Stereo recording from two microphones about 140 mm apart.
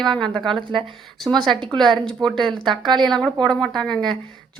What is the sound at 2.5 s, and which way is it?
Speech, 35° right (ahead or behind).